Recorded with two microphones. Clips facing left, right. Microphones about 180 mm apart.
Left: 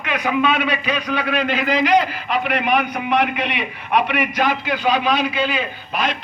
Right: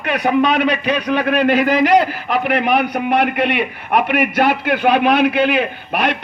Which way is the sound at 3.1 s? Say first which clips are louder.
Right 3 dB; 55° right (ahead or behind).